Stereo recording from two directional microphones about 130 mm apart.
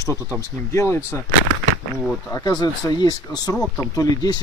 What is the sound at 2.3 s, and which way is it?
Speech, 30° left (ahead or behind).